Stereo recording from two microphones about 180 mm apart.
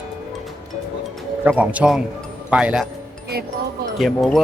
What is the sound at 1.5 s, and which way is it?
Speech, 10° right (ahead or behind).